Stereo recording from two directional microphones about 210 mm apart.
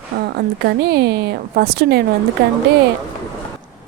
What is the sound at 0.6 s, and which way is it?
A woman's voice, 50° right (ahead or behind).